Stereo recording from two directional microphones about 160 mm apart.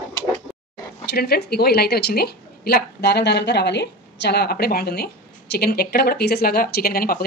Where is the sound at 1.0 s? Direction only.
80° left.